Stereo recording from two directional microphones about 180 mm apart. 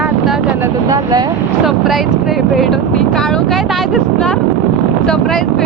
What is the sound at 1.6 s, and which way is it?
Speech, centre (ahead or behind).